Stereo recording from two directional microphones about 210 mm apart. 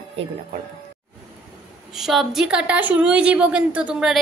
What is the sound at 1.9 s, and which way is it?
A woman's voice, centre (ahead or behind).